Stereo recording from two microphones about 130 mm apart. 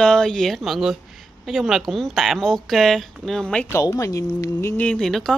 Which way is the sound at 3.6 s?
25° left (ahead or behind).